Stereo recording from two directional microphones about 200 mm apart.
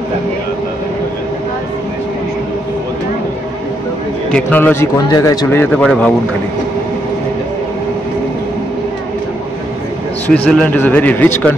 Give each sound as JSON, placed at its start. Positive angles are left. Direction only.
{"t": 4.3, "sound": "speech", "side_deg": 5}
{"t": 5.0, "sound": "speech", "side_deg": 20}
{"t": 10.2, "sound": "speech", "side_deg": 5}